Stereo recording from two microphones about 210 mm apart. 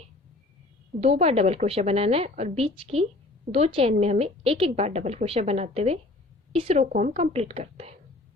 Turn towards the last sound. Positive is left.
turn(degrees=-30)  # may be behind; listen again after turning